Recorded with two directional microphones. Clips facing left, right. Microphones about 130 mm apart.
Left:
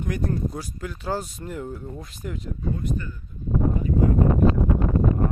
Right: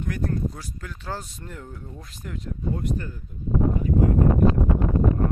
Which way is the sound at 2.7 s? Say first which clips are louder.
Even; 75° right (ahead or behind).